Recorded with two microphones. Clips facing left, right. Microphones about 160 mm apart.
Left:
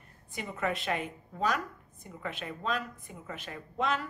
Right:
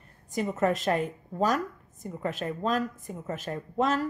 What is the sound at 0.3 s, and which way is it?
Speech, 40° right (ahead or behind).